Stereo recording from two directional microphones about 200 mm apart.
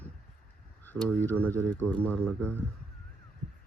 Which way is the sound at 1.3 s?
10° left (ahead or behind).